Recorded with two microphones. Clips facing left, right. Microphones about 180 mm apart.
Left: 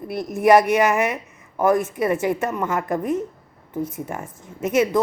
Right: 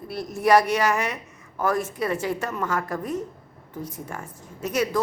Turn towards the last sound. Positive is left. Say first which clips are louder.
# left 6 dB
turn(degrees=20)  # may be behind; listen again after turning